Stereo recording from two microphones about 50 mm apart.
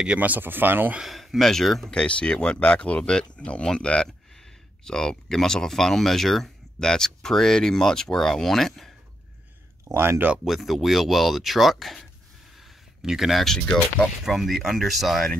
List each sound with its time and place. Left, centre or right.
0.2 s speech: right
1.0 s speech: centre
1.9 s speech: centre
4.3 s speech: centre
9.9 s speech: right
10.4 s speech: centre
12.5 s a sound: centre
14.2 s speech: centre